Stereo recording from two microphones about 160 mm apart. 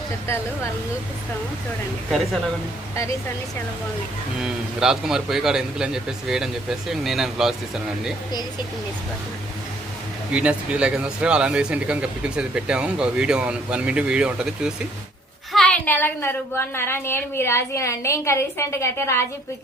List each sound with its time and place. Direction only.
2.0 s a man's voice: centre (ahead or behind)
4.4 s a man's voice: 5° right (ahead or behind)
10.3 s a woman's voice: 10° right (ahead or behind); by 19.2 s 15° left (ahead or behind)